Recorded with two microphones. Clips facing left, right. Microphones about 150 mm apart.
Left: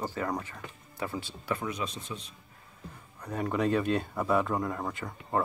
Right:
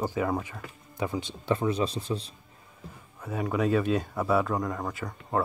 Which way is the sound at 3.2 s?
5° right (ahead or behind).